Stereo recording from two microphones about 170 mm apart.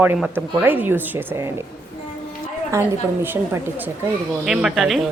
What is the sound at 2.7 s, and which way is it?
A man's voice, 15° right (ahead or behind).